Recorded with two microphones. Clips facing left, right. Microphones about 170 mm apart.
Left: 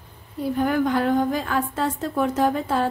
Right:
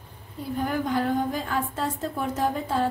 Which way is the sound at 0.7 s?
80° left.